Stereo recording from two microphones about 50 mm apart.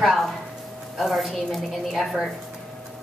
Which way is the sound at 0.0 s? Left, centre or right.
Centre.